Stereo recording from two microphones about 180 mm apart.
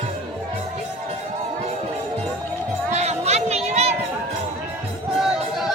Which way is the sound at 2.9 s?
35° right (ahead or behind).